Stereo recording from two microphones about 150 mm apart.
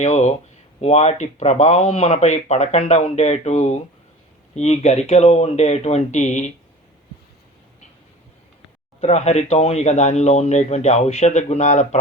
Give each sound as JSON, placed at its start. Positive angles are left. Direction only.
{"t": 0.0, "sound": "speech", "side_deg": 50}
{"t": 9.0, "sound": "speech", "side_deg": 40}